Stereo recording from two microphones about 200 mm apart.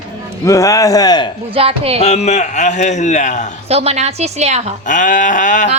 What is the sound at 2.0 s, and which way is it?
A man's voice, 30° left (ahead or behind).